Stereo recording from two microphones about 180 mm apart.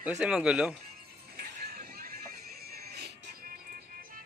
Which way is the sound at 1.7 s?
55° right (ahead or behind).